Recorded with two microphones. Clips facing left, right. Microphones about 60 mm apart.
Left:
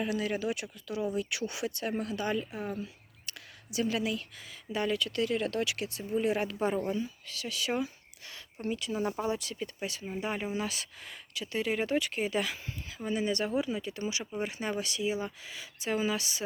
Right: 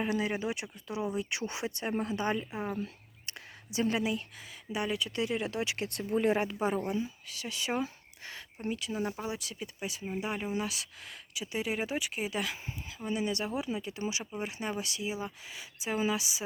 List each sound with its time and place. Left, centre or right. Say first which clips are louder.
0.0 s speech: even; right
3.2 s a sound: right 1 dB; right
4.7 s speech: left 2 dB; centre
5.6 s speech: even; right
5.9 s speech: right 4 dB; right
6.3 s speech: even; right
8.7 s speech: left 2 dB; centre
13.6 s speech: left 3 dB; centre
14.3 s speech: left 2 dB; centre